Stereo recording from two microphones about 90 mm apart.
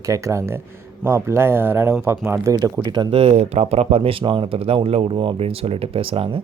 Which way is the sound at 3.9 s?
90° right.